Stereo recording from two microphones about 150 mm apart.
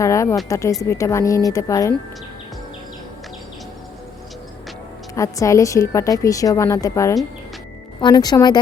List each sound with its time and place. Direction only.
0.0 s a woman's voice: 20° left (ahead or behind)
5.1 s a woman's voice: 20° left (ahead or behind)